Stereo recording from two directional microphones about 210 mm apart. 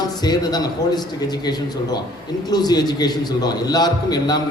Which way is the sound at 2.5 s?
20° left (ahead or behind).